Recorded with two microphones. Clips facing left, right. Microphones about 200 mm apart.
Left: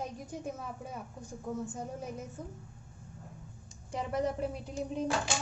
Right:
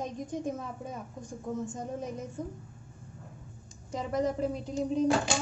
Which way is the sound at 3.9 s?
10° left (ahead or behind).